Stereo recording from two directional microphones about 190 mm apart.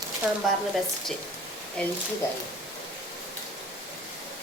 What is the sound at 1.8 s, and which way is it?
Speech, 5° left (ahead or behind).